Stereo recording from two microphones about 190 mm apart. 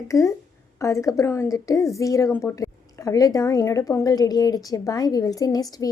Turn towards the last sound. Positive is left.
turn(degrees=20)  # may be behind; listen again after turning